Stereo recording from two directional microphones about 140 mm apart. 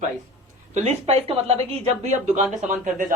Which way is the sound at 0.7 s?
55° right (ahead or behind).